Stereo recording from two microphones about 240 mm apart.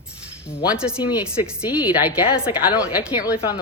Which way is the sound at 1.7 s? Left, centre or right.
Centre.